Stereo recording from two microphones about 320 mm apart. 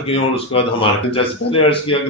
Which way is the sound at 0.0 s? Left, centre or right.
Centre.